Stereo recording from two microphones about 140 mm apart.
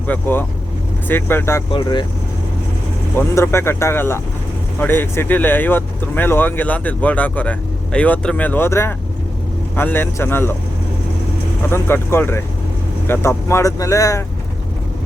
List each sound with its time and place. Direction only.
0.1 s speech: 15° left (ahead or behind)
1.7 s speech: 35° left (ahead or behind)
3.2 s speech: 15° left (ahead or behind)
11.7 s speech: 15° left (ahead or behind)